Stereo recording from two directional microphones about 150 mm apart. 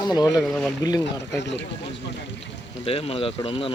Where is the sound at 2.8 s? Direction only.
40° left (ahead or behind).